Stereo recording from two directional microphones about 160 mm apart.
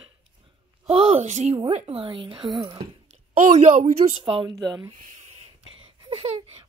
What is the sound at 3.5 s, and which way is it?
Speech, 45° right (ahead or behind).